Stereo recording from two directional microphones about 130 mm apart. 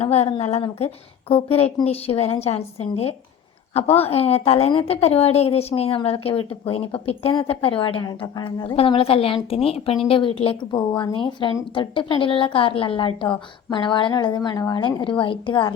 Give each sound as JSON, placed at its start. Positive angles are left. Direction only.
{"t": 0.0, "sound": "a woman's voice", "side_deg": 55}